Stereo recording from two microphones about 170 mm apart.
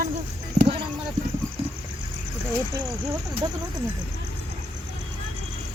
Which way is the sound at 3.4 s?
25° right (ahead or behind).